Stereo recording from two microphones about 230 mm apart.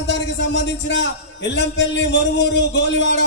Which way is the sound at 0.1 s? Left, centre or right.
Left.